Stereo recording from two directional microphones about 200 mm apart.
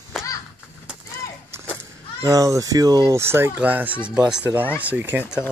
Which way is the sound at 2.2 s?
15° right (ahead or behind).